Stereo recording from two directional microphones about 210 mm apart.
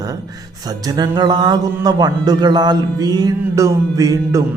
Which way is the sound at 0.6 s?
20° right (ahead or behind).